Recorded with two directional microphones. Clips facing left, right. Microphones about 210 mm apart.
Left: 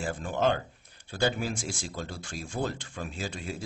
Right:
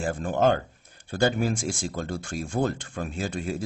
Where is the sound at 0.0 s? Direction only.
50° right (ahead or behind).